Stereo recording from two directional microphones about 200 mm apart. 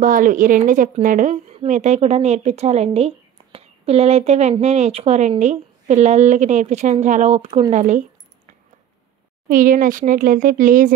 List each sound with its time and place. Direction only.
0.0 s speech: 40° right (ahead or behind)
9.5 s speech: 40° right (ahead or behind)